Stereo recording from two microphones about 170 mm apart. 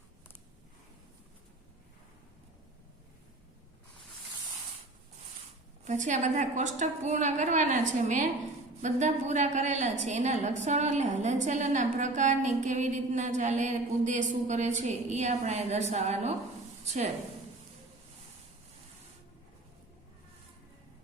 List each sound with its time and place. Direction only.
5.8 s a woman's voice: 45° right (ahead or behind)